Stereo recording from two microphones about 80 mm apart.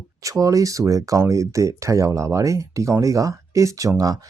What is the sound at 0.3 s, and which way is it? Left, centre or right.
Speech, right.